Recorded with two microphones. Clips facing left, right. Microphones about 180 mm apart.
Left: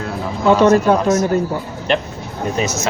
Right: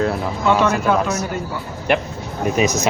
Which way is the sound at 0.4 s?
35° left (ahead or behind).